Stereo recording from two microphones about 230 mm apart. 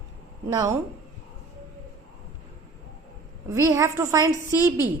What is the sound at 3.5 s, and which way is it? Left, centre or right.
Speech, centre.